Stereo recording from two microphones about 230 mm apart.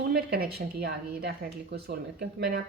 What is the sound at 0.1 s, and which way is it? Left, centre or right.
Speech, right.